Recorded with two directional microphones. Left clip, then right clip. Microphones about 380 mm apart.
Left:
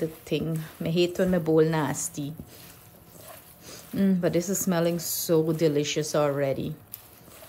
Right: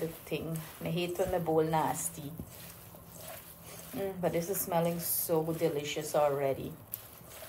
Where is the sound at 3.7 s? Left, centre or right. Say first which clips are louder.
Left 8 dB; left.